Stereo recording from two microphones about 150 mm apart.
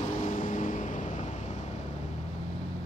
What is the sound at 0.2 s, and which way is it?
Vehicle, 60° left (ahead or behind).